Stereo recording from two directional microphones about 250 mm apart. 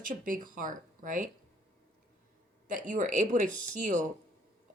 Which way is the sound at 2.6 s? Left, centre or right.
Right.